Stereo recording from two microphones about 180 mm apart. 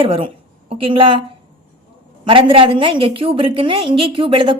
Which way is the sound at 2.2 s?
30° right (ahead or behind).